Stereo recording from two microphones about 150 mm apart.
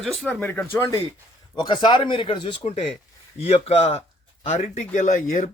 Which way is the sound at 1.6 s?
30° left (ahead or behind).